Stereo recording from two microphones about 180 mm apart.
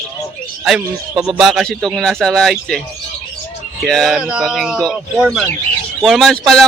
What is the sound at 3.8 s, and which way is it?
Speech, centre (ahead or behind).